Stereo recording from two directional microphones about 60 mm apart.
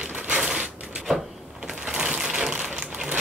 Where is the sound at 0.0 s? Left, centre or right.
Right.